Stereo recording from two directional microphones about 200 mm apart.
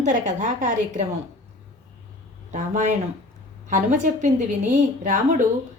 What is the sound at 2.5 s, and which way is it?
A woman's voice, 40° right (ahead or behind).